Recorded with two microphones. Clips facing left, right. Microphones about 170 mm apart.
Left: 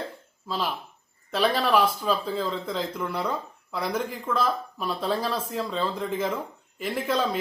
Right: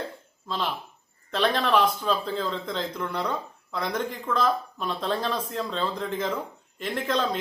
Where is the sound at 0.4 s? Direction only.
5° left (ahead or behind).